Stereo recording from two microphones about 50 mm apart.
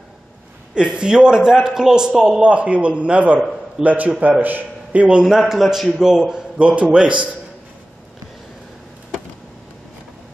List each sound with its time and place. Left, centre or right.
0.7 s a man's voice: centre
2.4 s a man's voice: right
5.2 s a man's voice: centre; by 7.2 s right